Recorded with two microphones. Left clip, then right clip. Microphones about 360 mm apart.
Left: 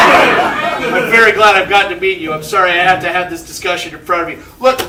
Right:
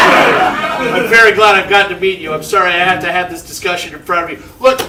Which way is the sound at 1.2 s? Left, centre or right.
Left.